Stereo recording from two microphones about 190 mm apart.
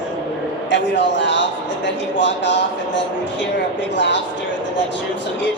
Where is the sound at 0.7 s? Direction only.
70° left (ahead or behind).